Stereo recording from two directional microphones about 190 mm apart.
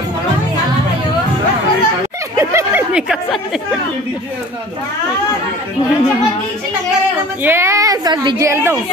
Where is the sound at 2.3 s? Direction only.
10° right (ahead or behind).